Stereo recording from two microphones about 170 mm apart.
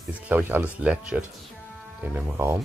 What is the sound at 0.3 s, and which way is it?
Speech, 10° right (ahead or behind).